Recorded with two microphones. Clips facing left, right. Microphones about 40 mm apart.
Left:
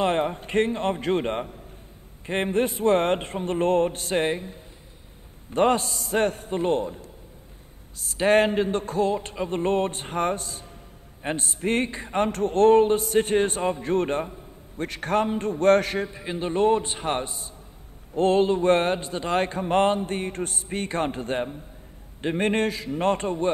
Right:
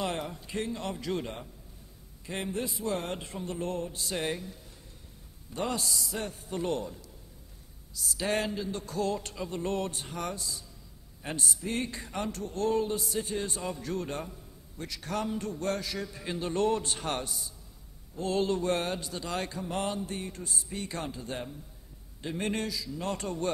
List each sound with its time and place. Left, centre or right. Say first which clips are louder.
0.0 s a man's voice: left 10 dB; left
5.5 s a man's voice: left 11 dB; left
6.5 s a man's voice: left 8 dB; left
9.0 s a man's voice: left 4 dB; left
16.1 s a man's voice: left 5 dB; left